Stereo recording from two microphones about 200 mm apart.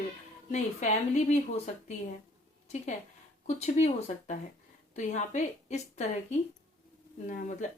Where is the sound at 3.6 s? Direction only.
35° left (ahead or behind).